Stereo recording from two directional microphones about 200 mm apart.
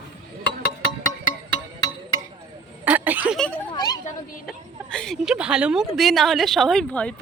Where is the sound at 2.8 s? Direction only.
10° right (ahead or behind).